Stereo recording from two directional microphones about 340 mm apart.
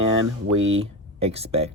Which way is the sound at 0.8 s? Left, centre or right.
Centre.